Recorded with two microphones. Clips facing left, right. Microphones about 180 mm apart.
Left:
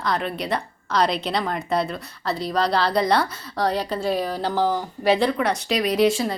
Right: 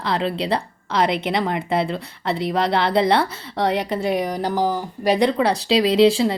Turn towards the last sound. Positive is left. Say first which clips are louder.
# right 4 dB
turn(degrees=-30)  # may be behind; listen again after turning